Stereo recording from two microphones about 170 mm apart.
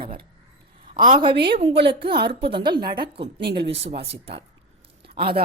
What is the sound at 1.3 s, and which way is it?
Speech, 75° right (ahead or behind).